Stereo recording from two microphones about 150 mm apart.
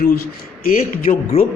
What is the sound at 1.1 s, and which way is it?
Speech, 40° left (ahead or behind).